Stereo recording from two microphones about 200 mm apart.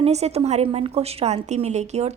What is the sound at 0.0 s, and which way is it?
A woman's voice, 30° right (ahead or behind).